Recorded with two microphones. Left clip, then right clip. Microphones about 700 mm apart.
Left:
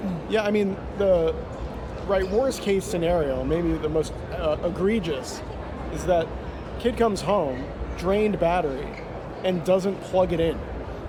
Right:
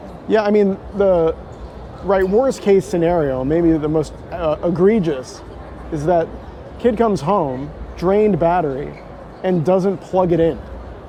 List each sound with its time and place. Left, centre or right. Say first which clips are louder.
0.3 s a man's voice: right 9 dB; right
6.8 s a man's voice: right 7 dB; right